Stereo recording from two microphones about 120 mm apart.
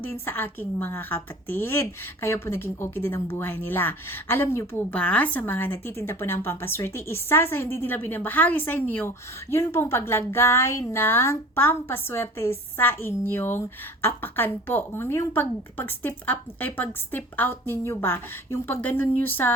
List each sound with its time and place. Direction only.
0.0 s a woman's voice: 15° left (ahead or behind)